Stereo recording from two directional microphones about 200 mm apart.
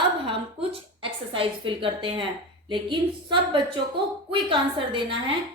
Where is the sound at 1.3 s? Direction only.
25° right (ahead or behind).